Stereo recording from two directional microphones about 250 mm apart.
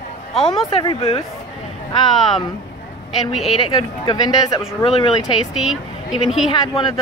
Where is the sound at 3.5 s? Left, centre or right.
Centre.